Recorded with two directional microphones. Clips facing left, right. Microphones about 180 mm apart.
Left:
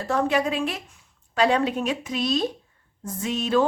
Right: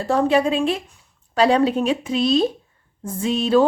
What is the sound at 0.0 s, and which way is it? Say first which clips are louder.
A woman's voice: right 5 dB; 30° right (ahead or behind).